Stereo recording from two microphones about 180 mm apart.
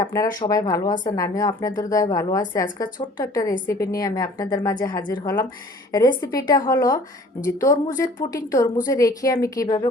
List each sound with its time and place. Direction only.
0.0 s a woman's voice: 20° left (ahead or behind)